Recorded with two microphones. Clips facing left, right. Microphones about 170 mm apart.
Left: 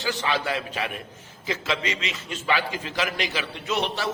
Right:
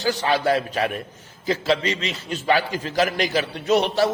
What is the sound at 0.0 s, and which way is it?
A man's voice, 40° right (ahead or behind).